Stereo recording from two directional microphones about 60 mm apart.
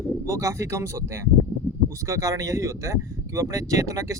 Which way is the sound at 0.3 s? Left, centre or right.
Right.